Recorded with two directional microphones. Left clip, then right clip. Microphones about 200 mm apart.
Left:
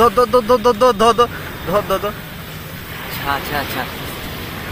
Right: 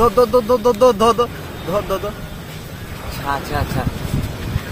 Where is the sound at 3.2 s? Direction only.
40° right (ahead or behind).